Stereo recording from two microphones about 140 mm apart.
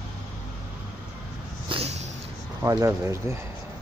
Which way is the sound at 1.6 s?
45° right (ahead or behind).